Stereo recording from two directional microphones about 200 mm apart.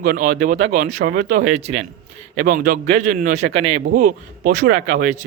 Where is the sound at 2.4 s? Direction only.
45° right (ahead or behind).